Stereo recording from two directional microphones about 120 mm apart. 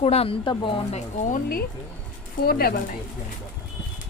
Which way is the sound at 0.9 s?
80° left.